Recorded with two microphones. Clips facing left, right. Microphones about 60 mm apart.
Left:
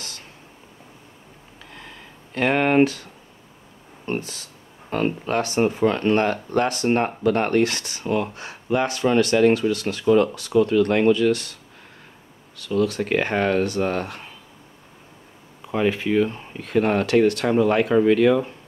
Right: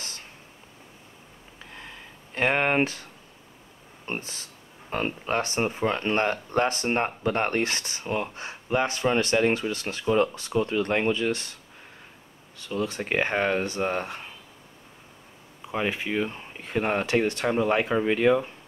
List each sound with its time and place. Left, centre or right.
2.3 s speech: right
4.0 s speech: right
12.5 s speech: right
15.7 s speech: centre